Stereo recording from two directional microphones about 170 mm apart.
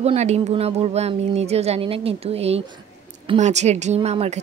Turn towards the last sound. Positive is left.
turn(degrees=-35)  # may be behind; listen again after turning